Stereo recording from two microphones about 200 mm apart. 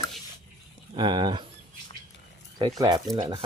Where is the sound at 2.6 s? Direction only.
20° right (ahead or behind).